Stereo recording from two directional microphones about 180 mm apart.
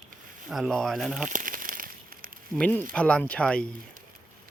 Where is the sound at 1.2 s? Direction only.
50° right (ahead or behind).